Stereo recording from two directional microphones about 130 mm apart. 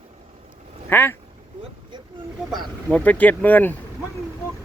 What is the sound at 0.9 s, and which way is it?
Speech, 15° left (ahead or behind).